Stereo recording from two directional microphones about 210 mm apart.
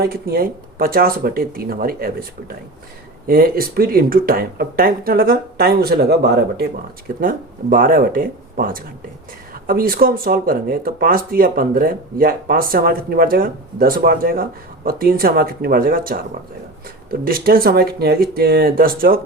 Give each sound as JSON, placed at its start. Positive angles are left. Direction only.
{"t": 0.0, "sound": "speech", "side_deg": -50}
{"t": 3.2, "sound": "speech", "side_deg": -45}